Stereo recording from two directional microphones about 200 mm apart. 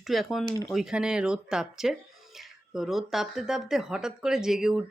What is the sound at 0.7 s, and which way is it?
Speech, 5° right (ahead or behind).